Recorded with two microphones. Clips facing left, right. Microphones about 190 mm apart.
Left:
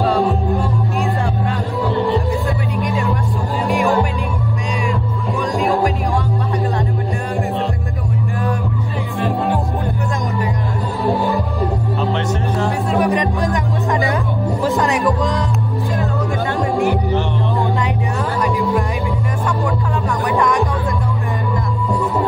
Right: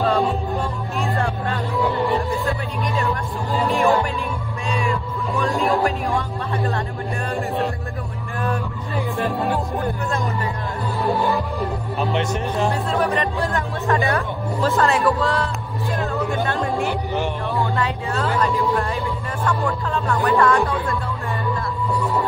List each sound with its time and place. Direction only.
5.4 s music: 15° left (ahead or behind)
12.0 s music: 15° right (ahead or behind)
12.9 s music: 15° left (ahead or behind)
19.4 s music: 15° left (ahead or behind)